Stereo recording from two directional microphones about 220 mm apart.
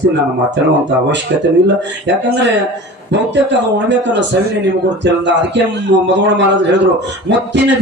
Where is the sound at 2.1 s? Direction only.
50° right (ahead or behind).